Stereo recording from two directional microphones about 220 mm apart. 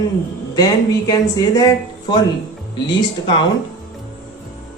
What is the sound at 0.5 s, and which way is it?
Speech, 15° left (ahead or behind).